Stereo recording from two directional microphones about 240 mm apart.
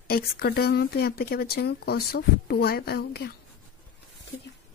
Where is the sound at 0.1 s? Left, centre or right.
Left.